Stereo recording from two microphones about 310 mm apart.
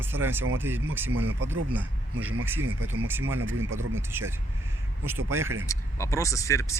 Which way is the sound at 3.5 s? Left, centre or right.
Centre.